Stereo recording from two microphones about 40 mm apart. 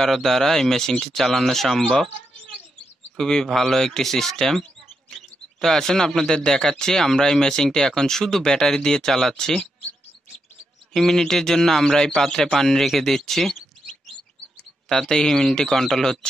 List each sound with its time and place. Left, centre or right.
0.0 s speech: centre
3.2 s speech: centre
10.9 s speech: centre
14.9 s speech: centre